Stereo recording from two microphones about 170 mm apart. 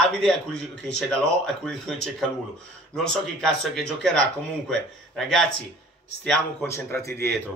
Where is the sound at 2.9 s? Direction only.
5° left (ahead or behind).